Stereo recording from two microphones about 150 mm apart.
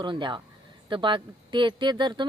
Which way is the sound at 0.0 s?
30° right (ahead or behind).